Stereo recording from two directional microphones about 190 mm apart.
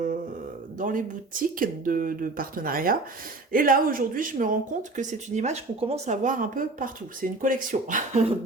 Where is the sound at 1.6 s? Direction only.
45° right (ahead or behind).